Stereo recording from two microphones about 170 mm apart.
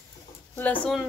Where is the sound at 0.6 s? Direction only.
10° left (ahead or behind).